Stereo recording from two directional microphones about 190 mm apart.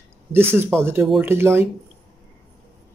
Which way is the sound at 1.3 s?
10° right (ahead or behind).